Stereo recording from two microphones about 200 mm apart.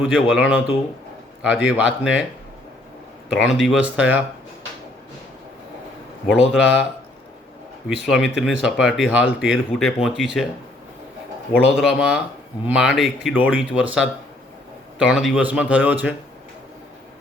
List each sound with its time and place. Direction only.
0.1 s speech: 5° right (ahead or behind)
3.3 s speech: centre (ahead or behind)
6.5 s speech: 5° right (ahead or behind)
8.0 s speech: centre (ahead or behind)
11.5 s speech: centre (ahead or behind)